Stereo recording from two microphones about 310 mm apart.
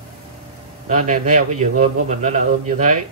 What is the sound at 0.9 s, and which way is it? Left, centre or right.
Speech, right.